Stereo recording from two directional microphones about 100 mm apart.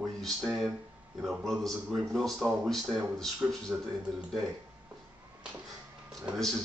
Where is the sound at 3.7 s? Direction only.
15° right (ahead or behind).